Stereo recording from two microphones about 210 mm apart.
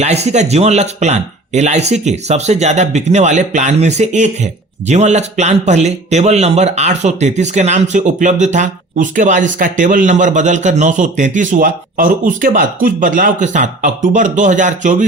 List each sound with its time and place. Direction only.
0.0 s speech: 30° right (ahead or behind)